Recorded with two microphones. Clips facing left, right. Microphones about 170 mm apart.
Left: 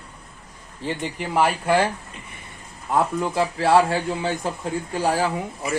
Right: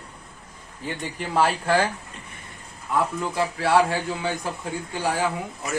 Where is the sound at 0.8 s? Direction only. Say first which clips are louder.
Left 3 dB; 15° left (ahead or behind).